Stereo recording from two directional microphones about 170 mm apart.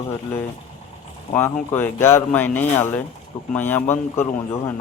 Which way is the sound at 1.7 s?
15° left (ahead or behind).